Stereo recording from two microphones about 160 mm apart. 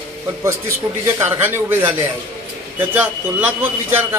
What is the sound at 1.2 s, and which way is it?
Speech, 15° right (ahead or behind).